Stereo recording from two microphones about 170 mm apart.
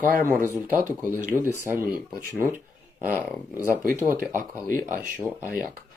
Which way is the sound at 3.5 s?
15° left (ahead or behind).